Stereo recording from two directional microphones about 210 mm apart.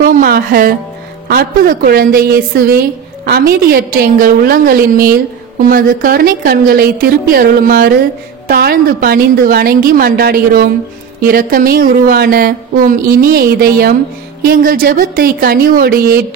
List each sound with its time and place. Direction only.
0.0 s music: 45° right (ahead or behind)
1.3 s a woman's voice: 45° right (ahead or behind)